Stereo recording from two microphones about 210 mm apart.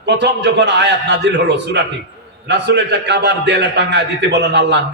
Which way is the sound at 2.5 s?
55° right (ahead or behind).